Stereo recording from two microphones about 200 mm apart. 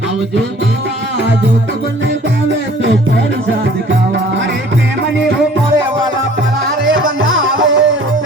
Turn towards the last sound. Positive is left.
turn(degrees=-70)  # may be behind; listen again after turning